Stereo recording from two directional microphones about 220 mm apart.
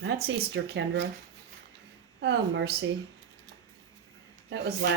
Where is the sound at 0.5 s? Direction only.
55° right (ahead or behind).